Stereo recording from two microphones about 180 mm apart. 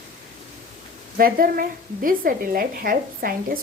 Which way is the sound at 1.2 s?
55° right (ahead or behind).